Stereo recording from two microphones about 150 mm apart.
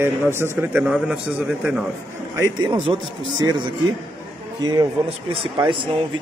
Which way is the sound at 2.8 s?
30° right (ahead or behind).